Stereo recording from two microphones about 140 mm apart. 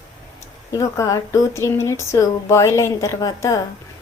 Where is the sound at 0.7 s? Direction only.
25° left (ahead or behind).